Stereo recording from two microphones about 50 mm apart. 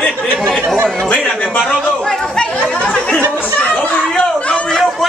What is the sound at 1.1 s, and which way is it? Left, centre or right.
Speech, left.